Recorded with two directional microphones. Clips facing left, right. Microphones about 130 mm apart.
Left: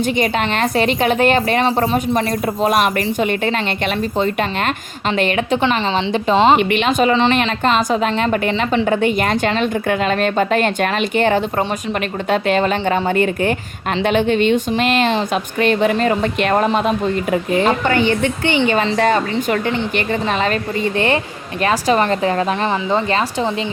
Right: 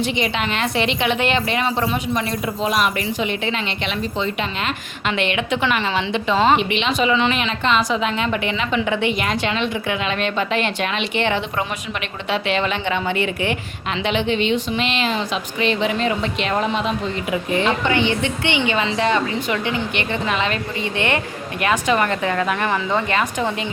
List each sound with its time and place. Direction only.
0.0 s a woman's voice: 45° left (ahead or behind)
6.3 s a woman's voice: 25° left (ahead or behind)
6.6 s a woman's voice: 50° left (ahead or behind)
21.6 s a woman's voice: 35° left (ahead or behind)